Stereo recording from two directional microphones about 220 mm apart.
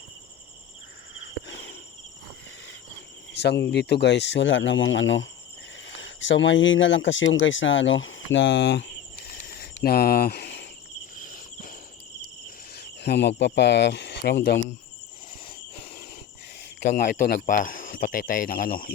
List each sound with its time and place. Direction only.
1.1 s cricket: 60° left (ahead or behind)
3.3 s speech: 50° left (ahead or behind)
9.3 s cricket: 45° left (ahead or behind)
11.2 s cricket: 40° left (ahead or behind)
12.7 s speech: 50° left (ahead or behind)
17.2 s speech: 35° left (ahead or behind)